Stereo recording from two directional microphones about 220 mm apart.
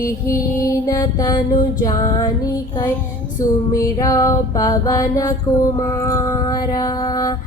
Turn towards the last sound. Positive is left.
turn(degrees=15)  # may be behind; listen again after turning